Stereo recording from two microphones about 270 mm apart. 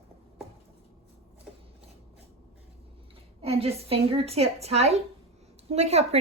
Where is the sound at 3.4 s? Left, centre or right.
Right.